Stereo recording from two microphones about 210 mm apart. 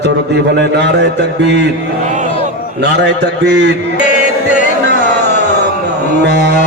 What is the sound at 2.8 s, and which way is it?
Speech, 55° right (ahead or behind).